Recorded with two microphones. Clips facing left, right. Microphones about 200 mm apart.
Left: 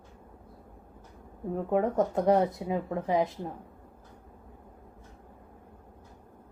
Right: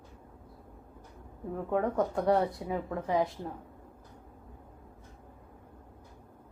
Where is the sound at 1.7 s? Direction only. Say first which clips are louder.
Left 3 dB; 20° left (ahead or behind).